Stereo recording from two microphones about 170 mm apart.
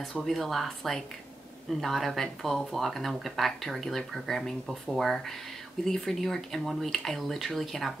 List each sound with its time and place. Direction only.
0.0 s speech: centre (ahead or behind)